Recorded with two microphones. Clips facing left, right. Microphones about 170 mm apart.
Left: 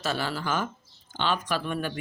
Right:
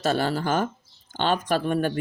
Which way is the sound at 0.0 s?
50° right (ahead or behind).